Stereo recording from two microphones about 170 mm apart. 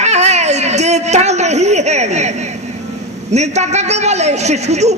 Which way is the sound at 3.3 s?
40° right (ahead or behind).